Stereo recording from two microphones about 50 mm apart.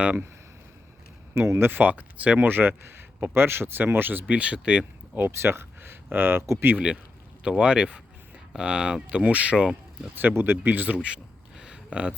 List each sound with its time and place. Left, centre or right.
1.3 s speech: right
2.5 s speech: right
4.4 s speech: right
5.1 s speech: right
6.4 s speech: right
7.4 s speech: centre
9.0 s speech: right
10.2 s speech: right
10.6 s speech: right
10.9 s a sound: centre